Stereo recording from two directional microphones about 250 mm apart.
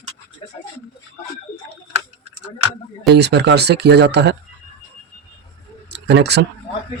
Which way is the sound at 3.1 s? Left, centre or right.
Right.